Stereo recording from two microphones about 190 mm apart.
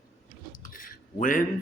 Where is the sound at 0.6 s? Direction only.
45° left (ahead or behind).